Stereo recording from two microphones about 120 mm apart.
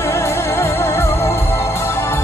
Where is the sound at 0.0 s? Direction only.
25° left (ahead or behind).